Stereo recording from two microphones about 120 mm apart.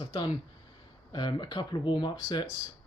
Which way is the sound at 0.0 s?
45° left (ahead or behind).